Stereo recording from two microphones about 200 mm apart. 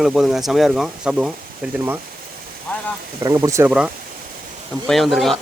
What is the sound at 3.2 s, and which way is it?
Speech, 15° right (ahead or behind).